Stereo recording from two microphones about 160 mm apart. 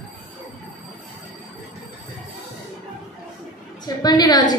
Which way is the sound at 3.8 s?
25° left (ahead or behind).